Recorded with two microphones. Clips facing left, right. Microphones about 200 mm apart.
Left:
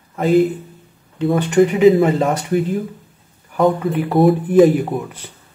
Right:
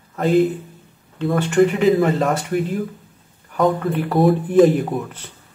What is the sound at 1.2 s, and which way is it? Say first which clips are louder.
Speech: left 2 dB; 20° left (ahead or behind).